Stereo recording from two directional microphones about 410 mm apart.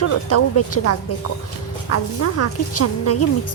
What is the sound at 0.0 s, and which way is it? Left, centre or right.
Speech, left.